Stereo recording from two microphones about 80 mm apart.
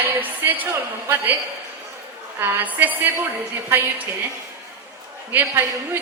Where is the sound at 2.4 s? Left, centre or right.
Right.